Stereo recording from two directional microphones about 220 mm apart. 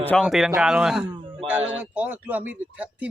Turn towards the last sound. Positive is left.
turn(degrees=-5)  # may be behind; listen again after turning